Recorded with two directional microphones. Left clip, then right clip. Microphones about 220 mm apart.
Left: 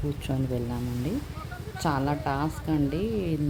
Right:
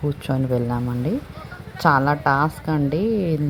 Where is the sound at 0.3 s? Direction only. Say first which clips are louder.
Right 10 dB; 20° right (ahead or behind).